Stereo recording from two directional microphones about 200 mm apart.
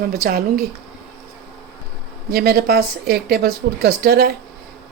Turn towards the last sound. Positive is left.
turn(degrees=-50)  # may be behind; listen again after turning